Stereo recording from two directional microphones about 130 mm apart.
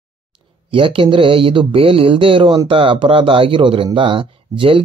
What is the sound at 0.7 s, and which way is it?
Speech, 45° right (ahead or behind).